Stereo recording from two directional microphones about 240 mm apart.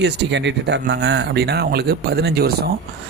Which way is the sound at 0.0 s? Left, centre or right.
Right.